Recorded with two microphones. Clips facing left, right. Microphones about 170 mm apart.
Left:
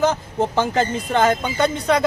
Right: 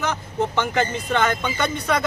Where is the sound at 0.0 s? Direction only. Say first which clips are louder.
Left 5 dB; 35° left (ahead or behind).